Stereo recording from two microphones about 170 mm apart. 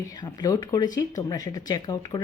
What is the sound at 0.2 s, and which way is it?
A woman's voice, 20° left (ahead or behind).